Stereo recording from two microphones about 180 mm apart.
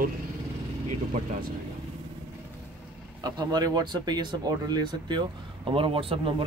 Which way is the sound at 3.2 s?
20° right (ahead or behind).